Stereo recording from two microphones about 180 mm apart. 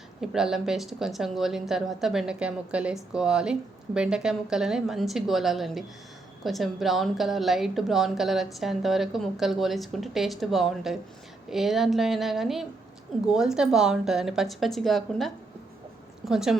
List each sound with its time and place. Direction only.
0.2 s a woman's voice: 5° right (ahead or behind)